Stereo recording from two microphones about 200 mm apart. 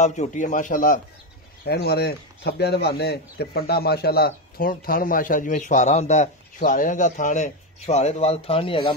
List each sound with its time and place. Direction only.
0.0 s a man's voice: 35° left (ahead or behind)
1.6 s a man's voice: 55° left (ahead or behind); by 8.9 s 25° left (ahead or behind)